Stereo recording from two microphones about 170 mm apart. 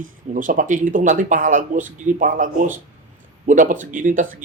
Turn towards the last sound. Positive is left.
turn(degrees=-50)  # may be behind; listen again after turning